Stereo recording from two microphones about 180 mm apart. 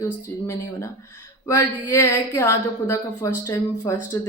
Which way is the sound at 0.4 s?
15° left (ahead or behind).